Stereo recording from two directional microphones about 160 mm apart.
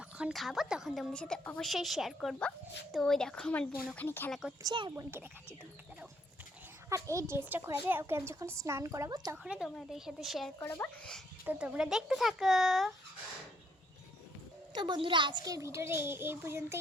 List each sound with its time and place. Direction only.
0.0 s a woman's voice: 5° right (ahead or behind); by 4.3 s 15° left (ahead or behind)
4.3 s a woman's voice: centre (ahead or behind)
4.6 s speech: 25° right (ahead or behind)
6.9 s a woman's voice: 20° right (ahead or behind)
9.4 s a woman's voice: 5° right (ahead or behind)
10.6 s speech: 10° left (ahead or behind)
11.4 s a woman's voice: 10° right (ahead or behind)
14.7 s a woman's voice: 30° right (ahead or behind)